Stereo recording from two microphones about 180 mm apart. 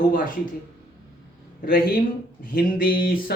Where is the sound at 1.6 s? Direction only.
55° left (ahead or behind).